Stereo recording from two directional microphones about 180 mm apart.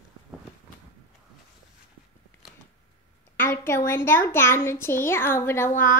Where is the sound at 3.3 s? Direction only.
15° left (ahead or behind).